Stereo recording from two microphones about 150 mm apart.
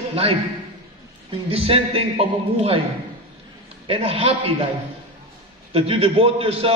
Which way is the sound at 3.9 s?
40° right (ahead or behind).